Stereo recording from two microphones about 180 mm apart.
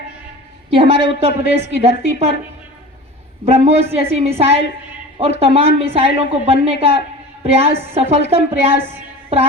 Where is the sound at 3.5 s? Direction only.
35° right (ahead or behind).